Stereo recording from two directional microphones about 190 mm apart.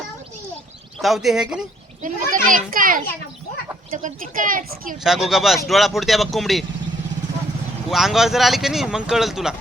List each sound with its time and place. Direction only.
1.0 s speech: centre (ahead or behind)
2.0 s a sound: 40° right (ahead or behind)
2.6 s a woman's voice: 45° right (ahead or behind)
5.0 s speech: centre (ahead or behind)
7.9 s speech: centre (ahead or behind)